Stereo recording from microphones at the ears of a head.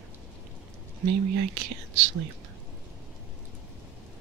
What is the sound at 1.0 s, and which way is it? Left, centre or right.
Speech, right.